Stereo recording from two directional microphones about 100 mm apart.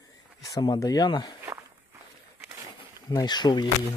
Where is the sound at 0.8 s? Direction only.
40° left (ahead or behind).